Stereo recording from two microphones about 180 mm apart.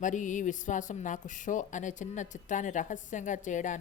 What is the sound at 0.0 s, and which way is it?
Speech, 45° left (ahead or behind).